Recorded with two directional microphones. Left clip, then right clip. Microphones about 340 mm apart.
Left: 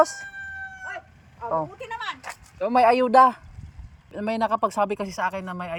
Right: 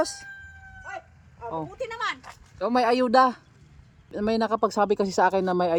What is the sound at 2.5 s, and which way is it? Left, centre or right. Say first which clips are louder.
Speech: left 4 dB; centre.